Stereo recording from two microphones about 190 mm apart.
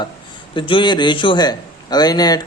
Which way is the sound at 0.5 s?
25° left (ahead or behind).